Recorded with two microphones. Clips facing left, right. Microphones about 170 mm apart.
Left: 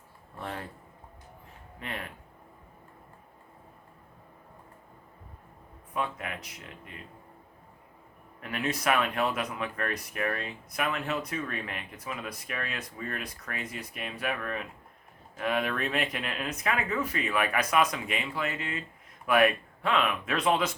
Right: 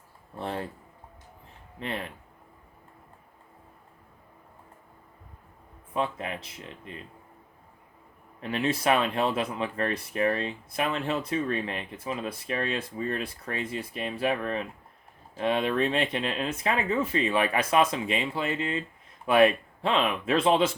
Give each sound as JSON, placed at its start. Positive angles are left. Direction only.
{"t": 0.3, "sound": "speech", "side_deg": -30}
{"t": 1.8, "sound": "speech", "side_deg": -30}
{"t": 5.9, "sound": "speech", "side_deg": -25}
{"t": 8.4, "sound": "speech", "side_deg": -30}